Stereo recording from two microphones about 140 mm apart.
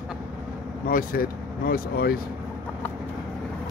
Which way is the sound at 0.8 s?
85° left.